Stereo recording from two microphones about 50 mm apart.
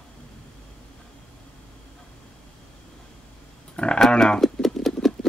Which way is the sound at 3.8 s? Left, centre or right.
Left.